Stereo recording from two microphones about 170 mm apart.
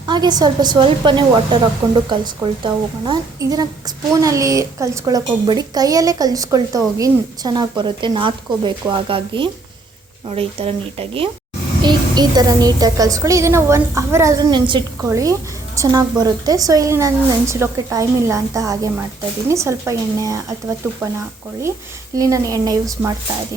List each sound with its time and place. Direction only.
0.0 s a woman's voice: 25° right (ahead or behind)
1.8 s a woman's voice: 15° right (ahead or behind)
22.1 s a woman's voice: 20° right (ahead or behind)